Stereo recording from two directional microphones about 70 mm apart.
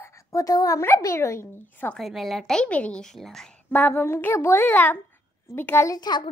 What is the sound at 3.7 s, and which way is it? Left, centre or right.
Speech, left.